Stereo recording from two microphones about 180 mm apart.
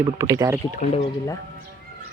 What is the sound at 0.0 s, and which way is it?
Speech, 15° right (ahead or behind).